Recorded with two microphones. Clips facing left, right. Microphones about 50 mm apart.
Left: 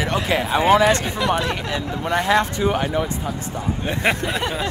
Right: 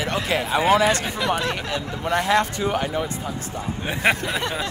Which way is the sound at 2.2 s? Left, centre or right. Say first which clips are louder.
Left 4 dB; left.